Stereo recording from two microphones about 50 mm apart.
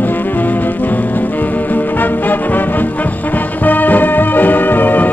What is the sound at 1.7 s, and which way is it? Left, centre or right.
Music, left.